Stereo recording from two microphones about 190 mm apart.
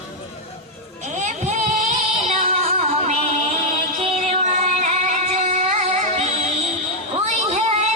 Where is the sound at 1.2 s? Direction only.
40° right (ahead or behind).